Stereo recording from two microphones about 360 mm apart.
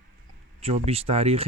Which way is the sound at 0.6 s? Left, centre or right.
Centre.